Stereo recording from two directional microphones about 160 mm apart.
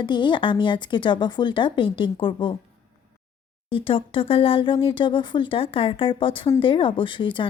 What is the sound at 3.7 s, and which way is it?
Speech, 35° left (ahead or behind).